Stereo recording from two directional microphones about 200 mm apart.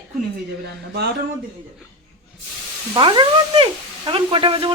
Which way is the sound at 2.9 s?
20° right (ahead or behind).